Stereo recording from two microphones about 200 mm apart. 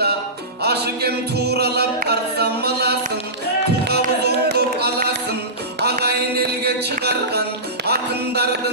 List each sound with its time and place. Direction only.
0.6 s music: 55° right (ahead or behind)